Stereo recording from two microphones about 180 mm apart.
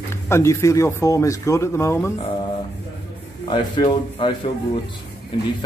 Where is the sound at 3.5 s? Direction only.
25° left (ahead or behind).